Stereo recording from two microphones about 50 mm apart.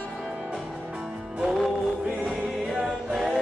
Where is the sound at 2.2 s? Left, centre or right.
Centre.